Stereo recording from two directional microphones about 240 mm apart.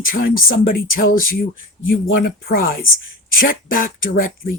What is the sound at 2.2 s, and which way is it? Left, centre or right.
Speech, left.